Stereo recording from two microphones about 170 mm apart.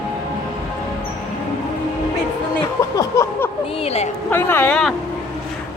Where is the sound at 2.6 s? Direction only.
20° left (ahead or behind).